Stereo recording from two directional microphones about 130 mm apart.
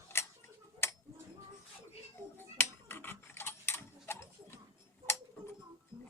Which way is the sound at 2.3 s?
15° left (ahead or behind).